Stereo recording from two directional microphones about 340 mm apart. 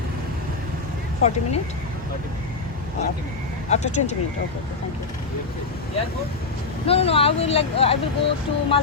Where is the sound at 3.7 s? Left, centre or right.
Centre.